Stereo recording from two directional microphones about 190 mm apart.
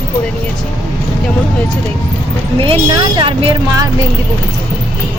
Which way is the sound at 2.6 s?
25° right (ahead or behind).